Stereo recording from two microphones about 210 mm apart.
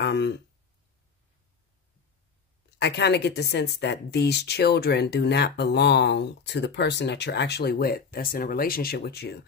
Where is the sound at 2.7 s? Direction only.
55° left (ahead or behind).